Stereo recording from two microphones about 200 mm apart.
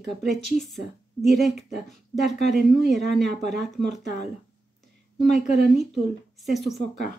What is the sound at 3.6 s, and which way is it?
Speech, centre (ahead or behind).